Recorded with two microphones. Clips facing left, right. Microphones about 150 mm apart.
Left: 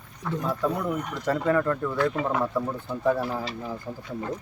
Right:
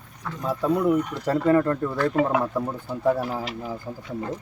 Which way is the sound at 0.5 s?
10° right (ahead or behind).